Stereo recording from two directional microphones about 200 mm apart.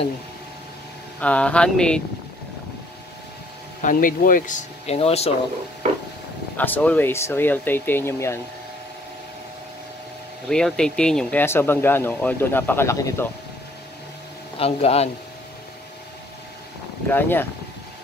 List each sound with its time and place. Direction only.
1.2 s speech: 5° left (ahead or behind)
3.8 s speech: 45° left (ahead or behind)
6.5 s speech: 10° left (ahead or behind)
10.5 s speech: 5° left (ahead or behind)
14.6 s speech: 30° left (ahead or behind)
17.1 s speech: 10° left (ahead or behind)